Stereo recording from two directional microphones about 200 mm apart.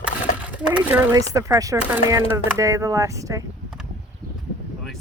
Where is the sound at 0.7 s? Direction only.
10° right (ahead or behind).